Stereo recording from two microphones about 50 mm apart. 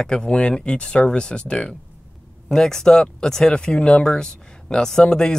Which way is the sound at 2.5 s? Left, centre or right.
Centre.